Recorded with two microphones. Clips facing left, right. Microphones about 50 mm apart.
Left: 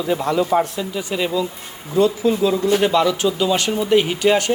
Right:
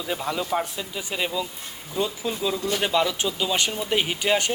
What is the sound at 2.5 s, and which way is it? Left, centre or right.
Speech, left.